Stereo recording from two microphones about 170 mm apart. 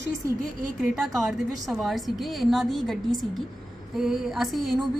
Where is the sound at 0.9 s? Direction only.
Centre (ahead or behind).